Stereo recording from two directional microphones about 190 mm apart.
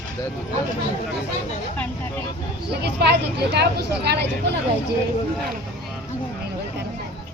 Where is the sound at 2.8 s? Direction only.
60° right (ahead or behind).